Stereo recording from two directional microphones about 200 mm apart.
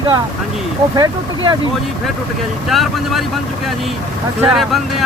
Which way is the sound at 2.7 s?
Centre (ahead or behind).